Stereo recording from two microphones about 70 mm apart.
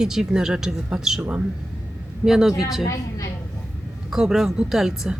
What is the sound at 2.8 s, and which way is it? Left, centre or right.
Speech, left.